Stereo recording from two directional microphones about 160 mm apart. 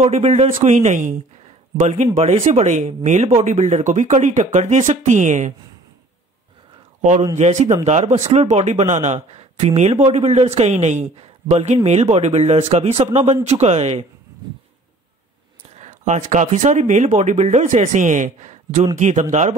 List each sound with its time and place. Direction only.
0.0 s speech: 45° right (ahead or behind)
7.0 s a man's voice: 50° right (ahead or behind)
15.7 s speech: 45° right (ahead or behind)